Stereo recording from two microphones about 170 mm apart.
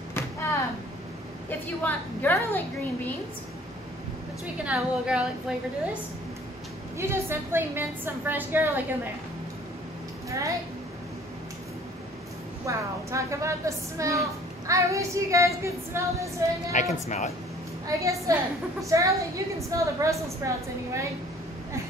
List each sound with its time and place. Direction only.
0.1 s a sound: 15° left (ahead or behind)
1.8 s a woman's voice: 10° left (ahead or behind)
4.6 s speech: 5° right (ahead or behind)
7.0 s a woman's voice: 15° right (ahead or behind)
12.6 s a woman's voice: 20° right (ahead or behind)
16.7 s speech: 45° left (ahead or behind)
17.8 s a woman's voice: 20° right (ahead or behind)